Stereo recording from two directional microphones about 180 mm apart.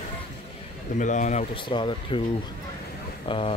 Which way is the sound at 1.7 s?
25° left (ahead or behind).